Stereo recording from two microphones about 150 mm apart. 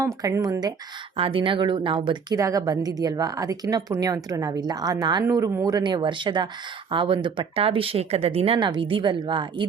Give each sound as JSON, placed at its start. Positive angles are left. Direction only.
{"t": 0.2, "sound": "a woman's voice", "side_deg": -20}
{"t": 1.1, "sound": "speech", "side_deg": -35}
{"t": 2.3, "sound": "a woman's voice", "side_deg": -25}